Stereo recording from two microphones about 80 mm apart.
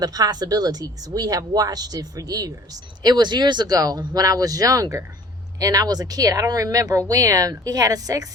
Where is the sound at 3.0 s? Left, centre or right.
Right.